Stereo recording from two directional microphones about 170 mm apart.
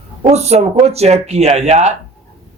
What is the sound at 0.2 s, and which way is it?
Speech, 40° right (ahead or behind).